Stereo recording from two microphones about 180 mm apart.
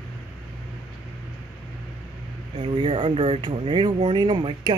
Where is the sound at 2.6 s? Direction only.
25° right (ahead or behind).